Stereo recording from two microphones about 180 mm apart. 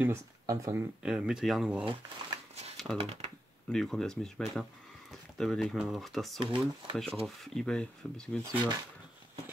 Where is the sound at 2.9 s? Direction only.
35° right (ahead or behind).